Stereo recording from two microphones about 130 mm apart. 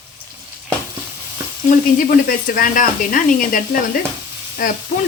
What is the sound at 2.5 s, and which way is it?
Stir, 90° left.